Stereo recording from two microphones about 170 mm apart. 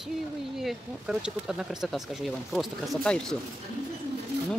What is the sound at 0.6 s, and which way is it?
Speech, 5° right (ahead or behind).